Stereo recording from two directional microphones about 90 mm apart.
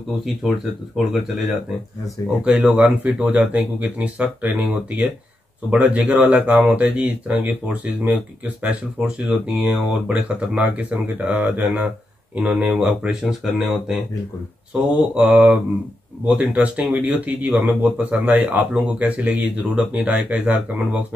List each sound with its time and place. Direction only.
0.4 s speech: 5° right (ahead or behind)
2.4 s speech: 15° right (ahead or behind)
14.8 s speech: 15° right (ahead or behind)